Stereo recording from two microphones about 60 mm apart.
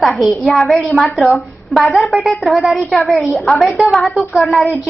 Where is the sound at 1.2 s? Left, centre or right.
Centre.